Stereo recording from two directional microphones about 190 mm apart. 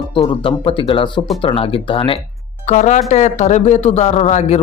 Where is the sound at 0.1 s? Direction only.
25° left (ahead or behind).